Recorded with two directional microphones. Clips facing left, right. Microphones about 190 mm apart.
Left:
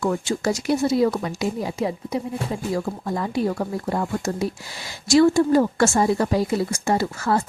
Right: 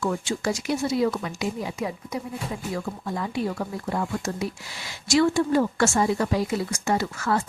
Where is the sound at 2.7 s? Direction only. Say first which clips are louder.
Left 5 dB; 40° left (ahead or behind).